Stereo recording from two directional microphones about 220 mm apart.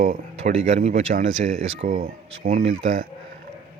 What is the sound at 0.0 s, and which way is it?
Speech, 35° right (ahead or behind).